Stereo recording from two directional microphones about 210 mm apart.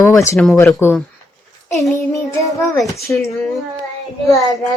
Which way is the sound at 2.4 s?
15° left (ahead or behind).